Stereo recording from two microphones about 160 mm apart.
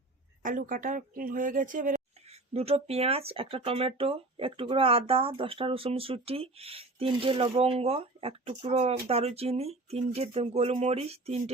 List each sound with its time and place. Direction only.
0.4 s a woman's voice: 55° right (ahead or behind); by 11.5 s 40° right (ahead or behind)